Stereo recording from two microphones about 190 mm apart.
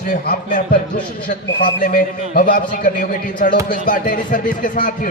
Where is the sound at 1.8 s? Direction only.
45° left (ahead or behind).